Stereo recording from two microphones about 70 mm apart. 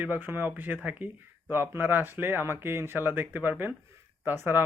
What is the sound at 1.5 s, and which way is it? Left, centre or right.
Speech, right.